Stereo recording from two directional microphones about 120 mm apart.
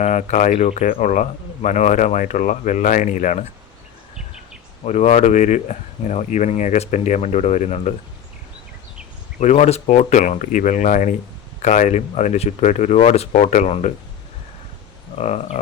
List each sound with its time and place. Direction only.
0.0 s speech: 80° left
4.9 s speech: 75° left (ahead or behind)
9.4 s speech: 70° left (ahead or behind)
15.2 s speech: 65° left (ahead or behind)